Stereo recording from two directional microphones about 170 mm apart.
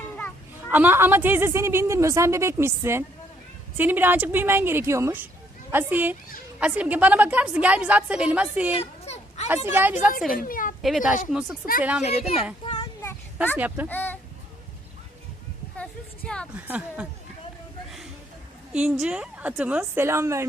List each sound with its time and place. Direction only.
0.7 s a woman's voice: 10° right (ahead or behind)
8.7 s a sound: 35° left (ahead or behind)
9.6 s a woman's voice: 10° right (ahead or behind)
10.3 s a woman's voice: 55° left (ahead or behind)
10.8 s a woman's voice: centre (ahead or behind)
12.0 s a child's voice: 40° left (ahead or behind)
12.6 s a sound: 25° left (ahead or behind)
13.0 s a sound: 10° left (ahead or behind)
13.6 s a woman's voice: 10° right (ahead or behind)
13.8 s speech: 10° left (ahead or behind)
15.8 s a woman's voice: 5° left (ahead or behind)
16.6 s a woman's voice: 10° right (ahead or behind)
18.7 s a woman's voice: 5° right (ahead or behind)